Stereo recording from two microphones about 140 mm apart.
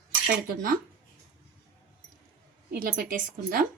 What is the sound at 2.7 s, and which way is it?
Speech, 90° right.